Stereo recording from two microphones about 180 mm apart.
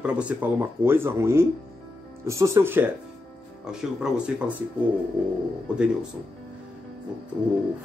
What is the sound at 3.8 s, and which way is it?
Speech, 5° right (ahead or behind).